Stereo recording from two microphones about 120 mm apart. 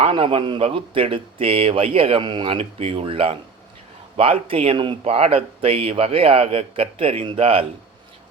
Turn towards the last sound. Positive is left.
turn(degrees=-50)  # may be behind; listen again after turning